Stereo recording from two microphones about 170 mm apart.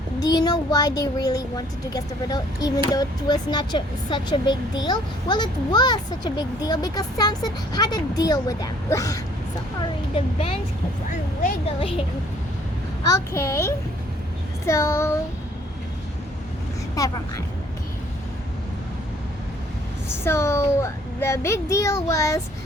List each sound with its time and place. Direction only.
0.2 s speech: 25° left (ahead or behind)
10.2 s speech: 35° left (ahead or behind)
13.1 s a child's voice: 15° left (ahead or behind)
16.9 s speech: 20° left (ahead or behind)
20.2 s a child's voice: 15° left (ahead or behind)